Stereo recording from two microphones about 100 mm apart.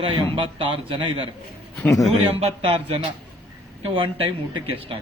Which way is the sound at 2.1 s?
85° right.